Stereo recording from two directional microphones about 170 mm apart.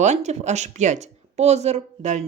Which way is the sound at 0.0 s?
45° right (ahead or behind).